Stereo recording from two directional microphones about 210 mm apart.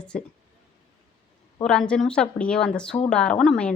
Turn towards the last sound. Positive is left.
turn(degrees=5)  # may be behind; listen again after turning